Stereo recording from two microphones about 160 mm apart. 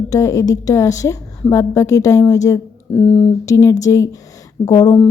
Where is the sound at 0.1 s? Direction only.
20° left (ahead or behind).